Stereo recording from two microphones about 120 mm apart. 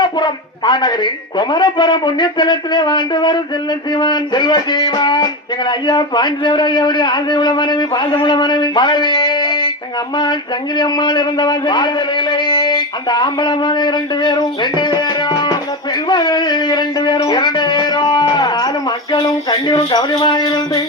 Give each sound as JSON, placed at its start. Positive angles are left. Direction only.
{"t": 0.0, "sound": "speech", "side_deg": 40}
{"t": 10.8, "sound": "speech", "side_deg": 40}